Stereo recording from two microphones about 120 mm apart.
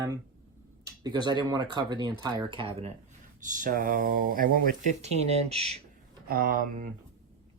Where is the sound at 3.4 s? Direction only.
90° right.